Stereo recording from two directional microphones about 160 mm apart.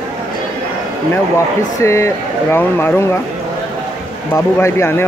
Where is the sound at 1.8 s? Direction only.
20° left (ahead or behind).